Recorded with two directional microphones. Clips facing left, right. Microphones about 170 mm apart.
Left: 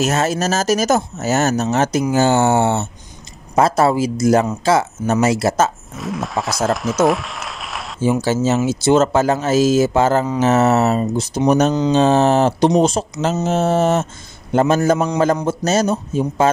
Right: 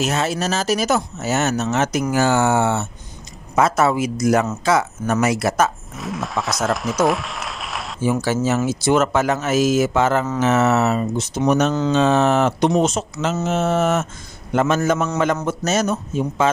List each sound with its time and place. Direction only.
0.0 s speech: 45° left (ahead or behind); by 5.7 s 30° left (ahead or behind)
5.9 s speech: centre (ahead or behind)
8.0 s speech: 25° left (ahead or behind)